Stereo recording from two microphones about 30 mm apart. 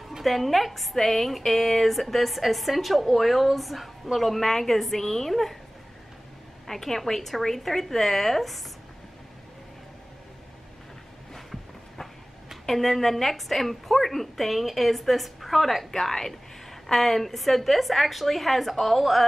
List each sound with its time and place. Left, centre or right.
0.2 s a woman's voice: centre
0.9 s a woman's voice: centre
6.7 s a woman's voice: centre
11.3 s a sound: centre
12.6 s a woman's voice: centre